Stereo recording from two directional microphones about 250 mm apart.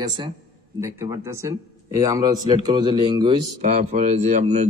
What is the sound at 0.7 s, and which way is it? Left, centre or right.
A man's voice, centre.